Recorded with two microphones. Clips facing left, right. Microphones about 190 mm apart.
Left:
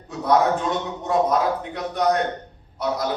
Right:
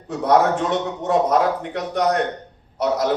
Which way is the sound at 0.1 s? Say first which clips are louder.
Right 2 dB; 75° right (ahead or behind).